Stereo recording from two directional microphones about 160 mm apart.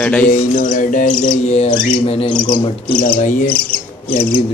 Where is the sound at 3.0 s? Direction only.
60° left (ahead or behind).